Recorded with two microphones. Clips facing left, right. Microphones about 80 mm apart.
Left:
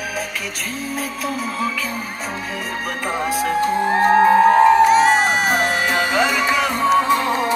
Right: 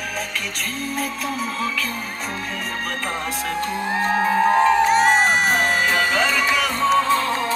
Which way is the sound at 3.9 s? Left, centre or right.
Left.